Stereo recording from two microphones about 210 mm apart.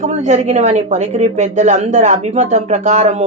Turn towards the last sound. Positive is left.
turn(degrees=-30)  # may be behind; listen again after turning